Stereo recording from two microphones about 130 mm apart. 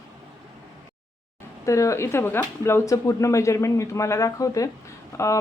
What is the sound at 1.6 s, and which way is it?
Speech, 25° left (ahead or behind).